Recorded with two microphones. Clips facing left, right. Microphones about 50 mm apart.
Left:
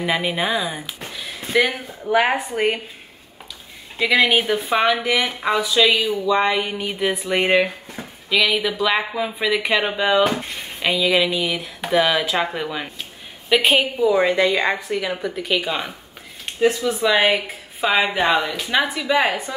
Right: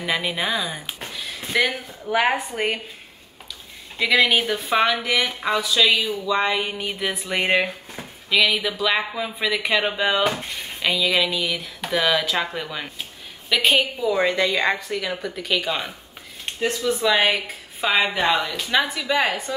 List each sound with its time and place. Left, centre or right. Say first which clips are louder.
0.0 s speech: left 3 dB; centre
1.1 s a sound: left 4 dB; centre
1.9 s a woman's voice: left 2 dB; centre
4.0 s speech: left 2 dB; centre